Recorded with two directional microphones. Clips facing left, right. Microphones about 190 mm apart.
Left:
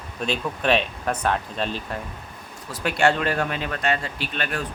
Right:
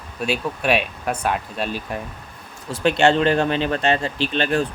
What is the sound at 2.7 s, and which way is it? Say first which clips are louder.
Speech: right 4 dB; 25° right (ahead or behind).